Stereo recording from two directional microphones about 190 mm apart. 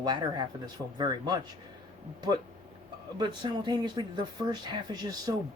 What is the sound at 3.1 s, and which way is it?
Speech, 25° right (ahead or behind).